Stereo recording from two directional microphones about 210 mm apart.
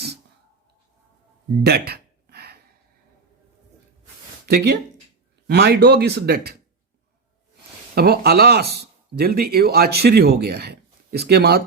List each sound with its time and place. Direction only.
1.6 s a sound: 50° right (ahead or behind)
4.4 s speech: 50° right (ahead or behind)
7.9 s speech: 50° right (ahead or behind)